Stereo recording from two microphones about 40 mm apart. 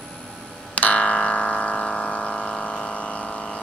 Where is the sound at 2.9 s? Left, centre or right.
Left.